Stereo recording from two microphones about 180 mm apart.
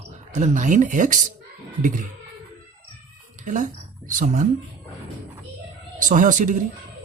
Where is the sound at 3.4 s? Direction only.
45° right (ahead or behind).